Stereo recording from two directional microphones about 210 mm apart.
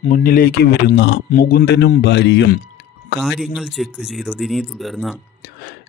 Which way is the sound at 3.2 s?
Centre (ahead or behind).